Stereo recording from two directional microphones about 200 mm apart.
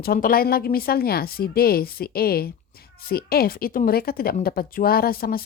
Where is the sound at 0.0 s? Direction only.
45° left (ahead or behind).